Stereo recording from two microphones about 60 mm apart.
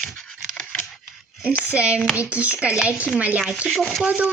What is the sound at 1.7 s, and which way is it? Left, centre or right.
A child's voice, centre.